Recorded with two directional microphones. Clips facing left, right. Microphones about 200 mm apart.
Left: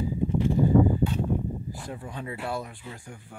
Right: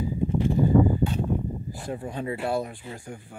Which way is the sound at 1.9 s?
30° right (ahead or behind).